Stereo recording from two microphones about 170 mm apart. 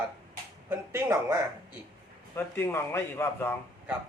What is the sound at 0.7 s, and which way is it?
Speech, 15° right (ahead or behind).